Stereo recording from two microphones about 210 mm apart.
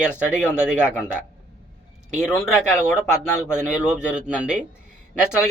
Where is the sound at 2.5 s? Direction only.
10° left (ahead or behind).